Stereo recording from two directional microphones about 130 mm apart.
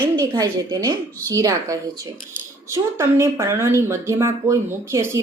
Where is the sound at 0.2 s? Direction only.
30° right (ahead or behind).